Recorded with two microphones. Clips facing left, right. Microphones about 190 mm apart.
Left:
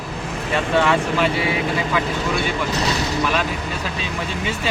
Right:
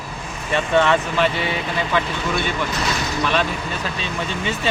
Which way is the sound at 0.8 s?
10° left (ahead or behind).